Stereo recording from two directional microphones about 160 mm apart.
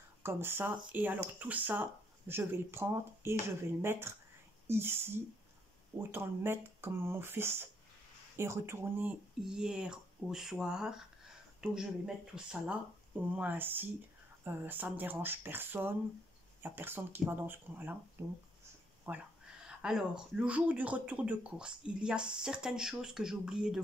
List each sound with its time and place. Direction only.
0.2 s speech: 15° right (ahead or behind)